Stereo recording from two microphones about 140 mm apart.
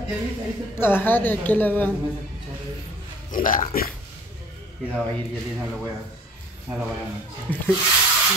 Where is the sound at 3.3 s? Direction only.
70° left (ahead or behind).